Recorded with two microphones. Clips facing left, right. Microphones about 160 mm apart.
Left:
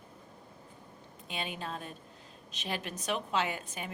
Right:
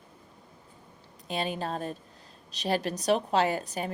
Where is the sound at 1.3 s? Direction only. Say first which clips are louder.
Right 7 dB; 40° right (ahead or behind).